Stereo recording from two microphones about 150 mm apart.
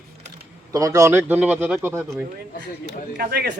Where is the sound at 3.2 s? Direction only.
90° right.